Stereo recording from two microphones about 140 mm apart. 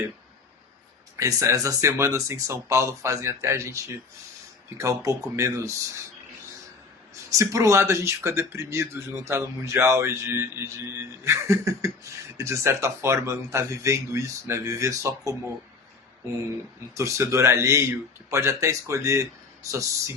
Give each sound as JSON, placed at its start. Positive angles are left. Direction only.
{"t": 1.2, "sound": "speech", "side_deg": -25}
{"t": 4.8, "sound": "speech", "side_deg": -20}
{"t": 7.3, "sound": "speech", "side_deg": -25}
{"t": 16.9, "sound": "speech", "side_deg": -20}